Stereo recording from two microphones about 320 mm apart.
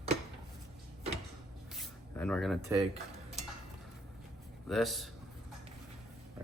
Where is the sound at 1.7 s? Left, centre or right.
Centre.